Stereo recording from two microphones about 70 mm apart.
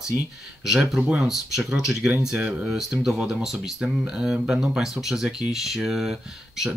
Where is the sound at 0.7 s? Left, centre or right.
Centre.